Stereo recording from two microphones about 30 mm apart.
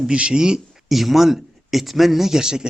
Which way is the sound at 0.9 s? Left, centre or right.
Centre.